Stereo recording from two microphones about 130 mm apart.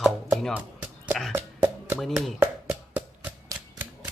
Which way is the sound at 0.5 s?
10° right (ahead or behind).